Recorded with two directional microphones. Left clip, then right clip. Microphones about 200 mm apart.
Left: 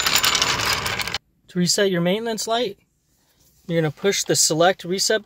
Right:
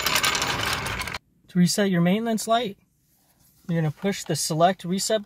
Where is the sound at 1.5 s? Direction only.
10° left (ahead or behind).